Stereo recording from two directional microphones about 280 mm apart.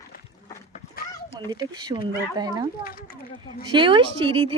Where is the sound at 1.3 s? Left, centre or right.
Centre.